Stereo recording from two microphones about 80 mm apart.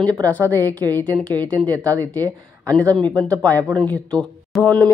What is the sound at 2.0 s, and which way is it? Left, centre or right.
A woman's voice, left.